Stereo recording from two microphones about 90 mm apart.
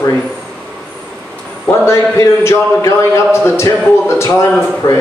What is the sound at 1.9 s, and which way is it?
Speech, 35° left (ahead or behind).